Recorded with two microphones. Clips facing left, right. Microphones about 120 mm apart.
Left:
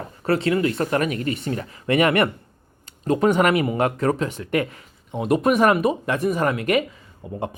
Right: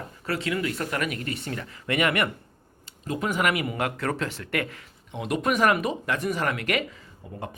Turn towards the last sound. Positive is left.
turn(degrees=20)  # may be behind; listen again after turning